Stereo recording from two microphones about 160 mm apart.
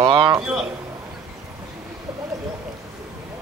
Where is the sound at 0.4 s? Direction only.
5° right (ahead or behind).